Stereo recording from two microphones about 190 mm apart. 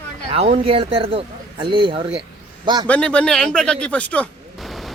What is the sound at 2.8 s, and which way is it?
Speech, 5° left (ahead or behind).